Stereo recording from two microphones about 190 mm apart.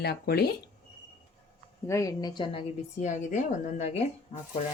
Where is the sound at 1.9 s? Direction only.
20° left (ahead or behind); by 4.1 s 35° left (ahead or behind).